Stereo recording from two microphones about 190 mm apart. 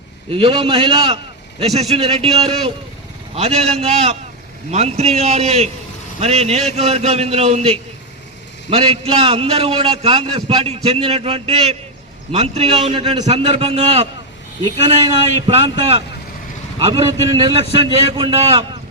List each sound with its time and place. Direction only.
0.3 s a man's voice: 30° right (ahead or behind)